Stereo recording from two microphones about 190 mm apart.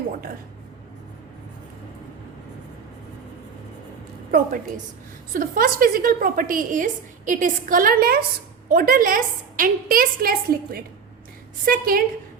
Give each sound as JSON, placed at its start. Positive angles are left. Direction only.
{"t": 4.3, "sound": "a woman's voice", "side_deg": -45}